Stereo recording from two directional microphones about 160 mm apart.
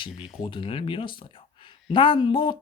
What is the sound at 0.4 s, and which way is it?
Speech, 30° left (ahead or behind).